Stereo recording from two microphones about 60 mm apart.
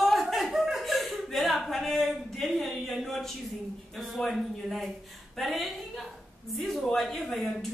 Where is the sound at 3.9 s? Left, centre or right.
Centre.